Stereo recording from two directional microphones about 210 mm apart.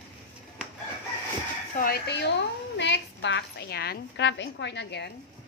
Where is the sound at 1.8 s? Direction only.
50° left (ahead or behind).